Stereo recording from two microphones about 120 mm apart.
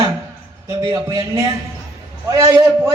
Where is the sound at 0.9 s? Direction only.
30° right (ahead or behind).